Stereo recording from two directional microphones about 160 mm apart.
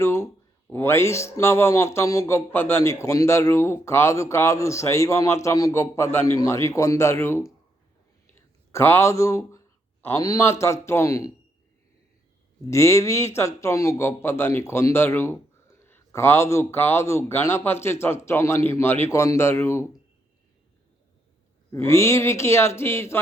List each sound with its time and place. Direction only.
0.0 s a sound: 15° left (ahead or behind)
0.7 s a man's voice: 15° left (ahead or behind)
8.7 s a man's voice: 15° left (ahead or behind)
12.7 s a man's voice: 20° left (ahead or behind)
21.7 s a man's voice: 15° left (ahead or behind)